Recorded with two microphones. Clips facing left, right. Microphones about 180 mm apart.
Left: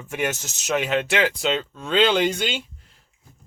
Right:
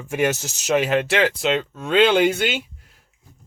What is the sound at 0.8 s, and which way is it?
Speech, 40° right (ahead or behind).